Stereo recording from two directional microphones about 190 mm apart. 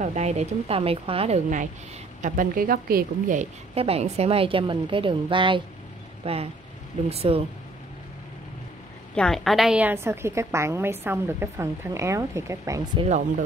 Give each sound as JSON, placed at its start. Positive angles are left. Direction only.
{"t": 0.0, "sound": "a woman's voice", "side_deg": -35}
{"t": 9.1, "sound": "a woman's voice", "side_deg": 5}